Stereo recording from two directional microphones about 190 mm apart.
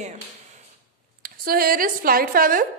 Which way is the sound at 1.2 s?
50° right (ahead or behind).